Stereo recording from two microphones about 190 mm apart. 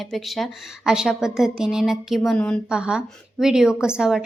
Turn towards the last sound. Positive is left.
turn(degrees=-5)  # may be behind; listen again after turning